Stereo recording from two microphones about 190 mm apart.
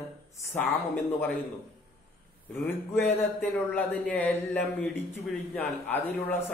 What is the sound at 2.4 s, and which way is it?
A man's voice, 10° left (ahead or behind).